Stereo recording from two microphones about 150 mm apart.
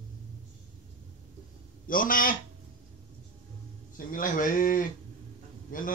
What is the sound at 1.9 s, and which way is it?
Speech, 65° left (ahead or behind).